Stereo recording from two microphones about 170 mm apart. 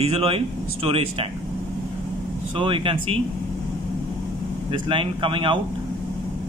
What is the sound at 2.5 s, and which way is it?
Speech, 30° right (ahead or behind).